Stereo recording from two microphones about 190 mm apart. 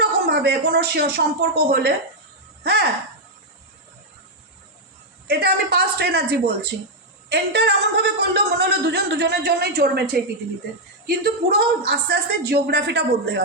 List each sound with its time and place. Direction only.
0.0 s speech: 60° right (ahead or behind)
5.3 s speech: 60° right (ahead or behind)